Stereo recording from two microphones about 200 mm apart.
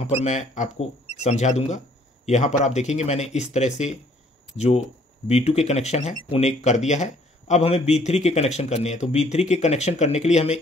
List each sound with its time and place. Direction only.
0.0 s a man's voice: 35° left (ahead or behind)